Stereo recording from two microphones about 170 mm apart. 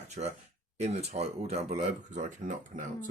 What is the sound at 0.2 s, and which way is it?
Speech, 50° right (ahead or behind).